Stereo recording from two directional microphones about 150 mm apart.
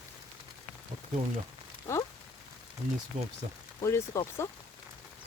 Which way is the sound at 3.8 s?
20° left (ahead or behind).